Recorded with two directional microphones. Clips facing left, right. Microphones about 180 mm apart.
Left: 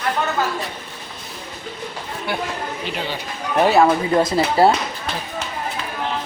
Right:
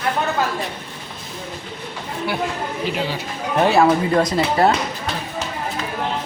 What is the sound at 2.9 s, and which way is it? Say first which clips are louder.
Speech: right 3 dB; centre (ahead or behind).